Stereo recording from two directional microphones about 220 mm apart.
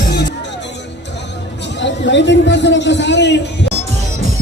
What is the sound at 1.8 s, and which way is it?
A man's voice, 55° left (ahead or behind).